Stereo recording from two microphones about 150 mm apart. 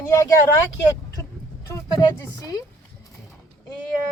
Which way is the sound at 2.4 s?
20° left (ahead or behind).